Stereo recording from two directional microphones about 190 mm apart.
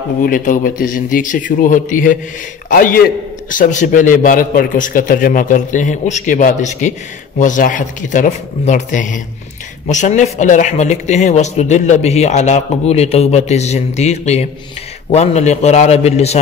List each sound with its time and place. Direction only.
0.2 s a man's voice: 45° left (ahead or behind)